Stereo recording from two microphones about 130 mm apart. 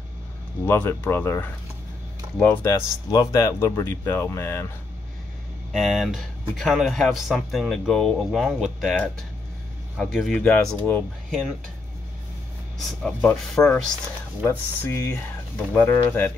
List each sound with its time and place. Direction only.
0.7 s speech: 15° left (ahead or behind)
5.7 s speech: centre (ahead or behind)
9.9 s speech: 5° left (ahead or behind)
12.7 s speech: 5° left (ahead or behind)